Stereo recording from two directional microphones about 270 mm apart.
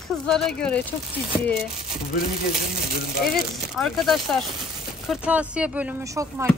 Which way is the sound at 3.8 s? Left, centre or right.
Centre.